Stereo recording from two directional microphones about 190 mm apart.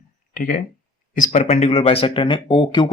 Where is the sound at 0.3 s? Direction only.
45° left (ahead or behind).